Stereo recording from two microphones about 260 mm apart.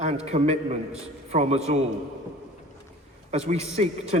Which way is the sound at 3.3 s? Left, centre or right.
Right.